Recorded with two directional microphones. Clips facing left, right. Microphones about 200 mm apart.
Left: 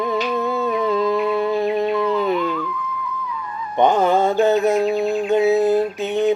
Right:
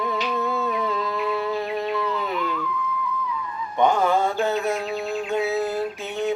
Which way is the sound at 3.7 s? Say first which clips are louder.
Left 4 dB; 20° left (ahead or behind).